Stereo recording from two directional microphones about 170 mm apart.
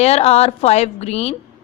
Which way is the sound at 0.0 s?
40° left (ahead or behind).